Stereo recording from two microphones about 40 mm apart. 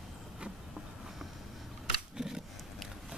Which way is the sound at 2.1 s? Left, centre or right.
Centre.